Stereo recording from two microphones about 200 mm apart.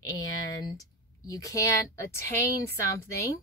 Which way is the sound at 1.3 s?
15° left (ahead or behind).